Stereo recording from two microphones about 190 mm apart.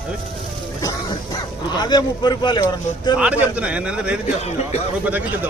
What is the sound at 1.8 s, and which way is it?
Speech, 20° left (ahead or behind).